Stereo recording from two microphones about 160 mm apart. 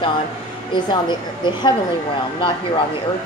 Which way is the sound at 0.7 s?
30° left (ahead or behind).